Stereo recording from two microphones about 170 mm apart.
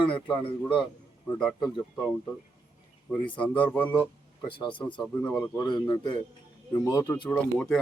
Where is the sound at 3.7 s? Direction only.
10° left (ahead or behind).